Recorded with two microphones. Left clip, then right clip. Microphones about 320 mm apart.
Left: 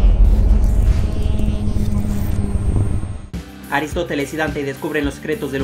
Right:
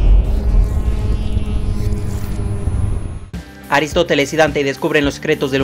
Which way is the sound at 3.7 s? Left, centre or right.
Right.